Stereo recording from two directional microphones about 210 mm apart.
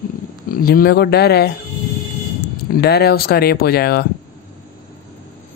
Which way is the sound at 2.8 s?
50° left (ahead or behind).